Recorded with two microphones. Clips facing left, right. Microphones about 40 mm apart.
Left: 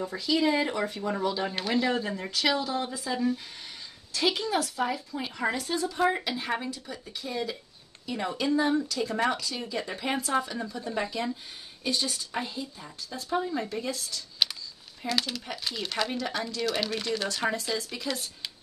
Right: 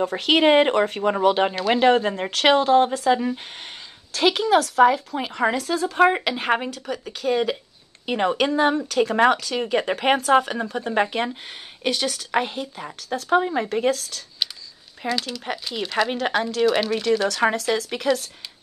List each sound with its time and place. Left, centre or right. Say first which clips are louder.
0.0 s speech: right 8 dB; right
11.8 s speech: right 6 dB; right
15.2 s speech: right 5 dB; right